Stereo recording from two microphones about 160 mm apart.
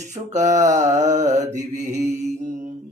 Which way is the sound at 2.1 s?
45° right (ahead or behind).